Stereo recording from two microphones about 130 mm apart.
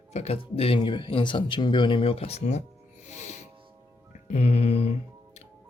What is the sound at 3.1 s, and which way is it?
Music, 65° left (ahead or behind).